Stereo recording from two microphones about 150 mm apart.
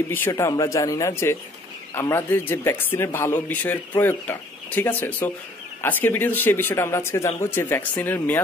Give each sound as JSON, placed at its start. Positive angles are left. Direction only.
{"t": 0.1, "sound": "speech", "side_deg": 15}